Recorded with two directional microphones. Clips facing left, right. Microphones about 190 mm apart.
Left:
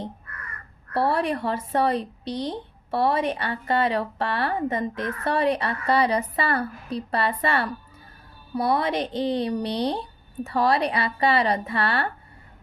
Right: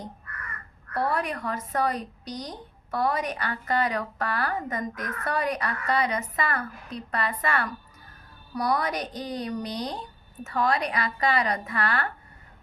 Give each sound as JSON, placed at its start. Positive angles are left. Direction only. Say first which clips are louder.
{"t": 0.9, "sound": "speech", "louder": "left 5 dB", "side_deg": 30}